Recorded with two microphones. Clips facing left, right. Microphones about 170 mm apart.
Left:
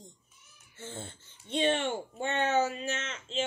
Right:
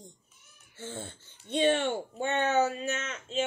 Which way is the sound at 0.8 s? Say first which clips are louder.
Right 3 dB; 55° right (ahead or behind).